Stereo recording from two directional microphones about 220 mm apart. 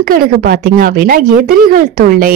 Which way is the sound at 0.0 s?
40° right (ahead or behind).